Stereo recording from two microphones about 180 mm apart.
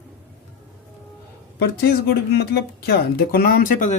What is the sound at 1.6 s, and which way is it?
Speech, 65° left (ahead or behind).